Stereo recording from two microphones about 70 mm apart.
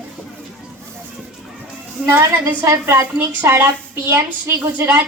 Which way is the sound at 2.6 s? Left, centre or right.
Right.